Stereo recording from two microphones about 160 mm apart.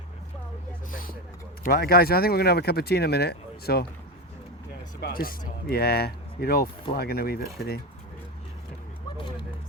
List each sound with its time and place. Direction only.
0.9 s a sound: 60° left (ahead or behind)
1.6 s speech: 70° left (ahead or behind)
4.9 s speech: 75° left (ahead or behind)
9.1 s vehicle: 30° left (ahead or behind)